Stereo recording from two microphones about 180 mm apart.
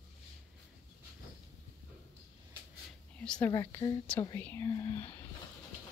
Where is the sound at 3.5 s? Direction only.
20° left (ahead or behind).